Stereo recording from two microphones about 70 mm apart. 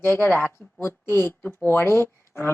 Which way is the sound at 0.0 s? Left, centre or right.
Left.